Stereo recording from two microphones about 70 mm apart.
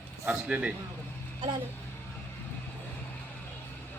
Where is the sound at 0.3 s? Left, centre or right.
Centre.